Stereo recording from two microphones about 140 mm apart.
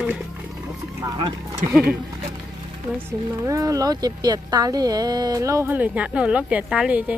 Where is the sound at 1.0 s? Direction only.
30° right (ahead or behind).